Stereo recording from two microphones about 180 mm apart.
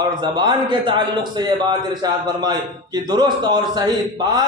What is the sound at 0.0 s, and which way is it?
A man's voice, 25° right (ahead or behind).